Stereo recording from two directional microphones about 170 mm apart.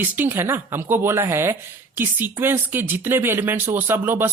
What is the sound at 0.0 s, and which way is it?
Speech, 10° right (ahead or behind).